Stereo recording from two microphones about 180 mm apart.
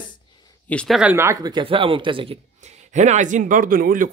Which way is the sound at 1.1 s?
15° right (ahead or behind).